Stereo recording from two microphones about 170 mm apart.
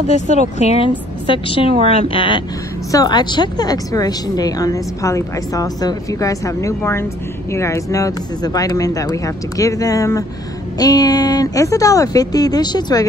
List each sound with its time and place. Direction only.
0.1 s a woman's voice: 40° left (ahead or behind); by 13.0 s 25° left (ahead or behind)